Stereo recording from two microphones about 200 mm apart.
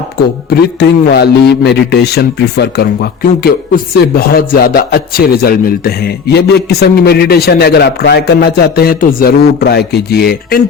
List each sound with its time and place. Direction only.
0.2 s a man's voice: 50° left (ahead or behind)